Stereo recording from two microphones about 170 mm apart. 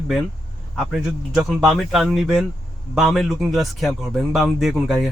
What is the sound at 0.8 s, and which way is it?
A man's voice, centre (ahead or behind).